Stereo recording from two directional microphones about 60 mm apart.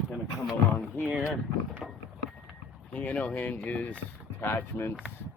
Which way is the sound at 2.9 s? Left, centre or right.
Left.